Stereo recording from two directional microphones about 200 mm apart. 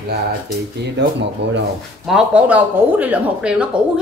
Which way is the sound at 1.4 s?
60° right (ahead or behind).